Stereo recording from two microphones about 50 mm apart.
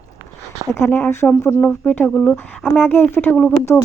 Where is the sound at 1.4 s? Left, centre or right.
Left.